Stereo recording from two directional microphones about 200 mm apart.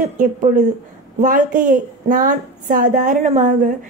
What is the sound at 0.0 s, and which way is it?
Speech, 40° right (ahead or behind).